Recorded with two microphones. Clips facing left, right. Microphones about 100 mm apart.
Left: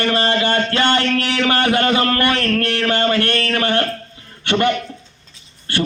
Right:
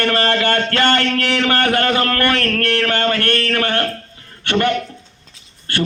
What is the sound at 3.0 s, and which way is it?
Speech, 45° right (ahead or behind).